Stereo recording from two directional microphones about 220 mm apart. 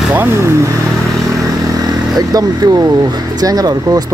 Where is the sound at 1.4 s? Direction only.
15° right (ahead or behind).